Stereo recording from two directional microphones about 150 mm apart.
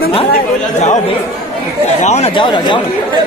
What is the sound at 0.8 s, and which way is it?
Speech, 50° left (ahead or behind).